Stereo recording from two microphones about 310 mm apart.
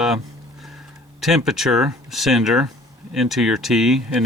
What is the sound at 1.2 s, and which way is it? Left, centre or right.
Speech, centre.